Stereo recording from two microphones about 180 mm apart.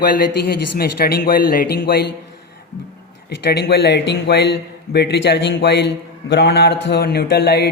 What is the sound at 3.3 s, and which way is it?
A man's voice, 65° left (ahead or behind).